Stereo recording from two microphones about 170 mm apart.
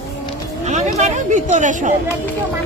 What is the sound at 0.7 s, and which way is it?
Speech, 45° right (ahead or behind).